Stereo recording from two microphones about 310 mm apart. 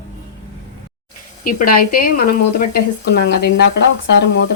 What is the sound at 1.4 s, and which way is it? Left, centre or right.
Speech, left.